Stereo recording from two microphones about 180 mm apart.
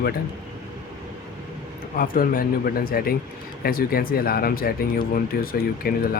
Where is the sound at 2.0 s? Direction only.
50° left (ahead or behind).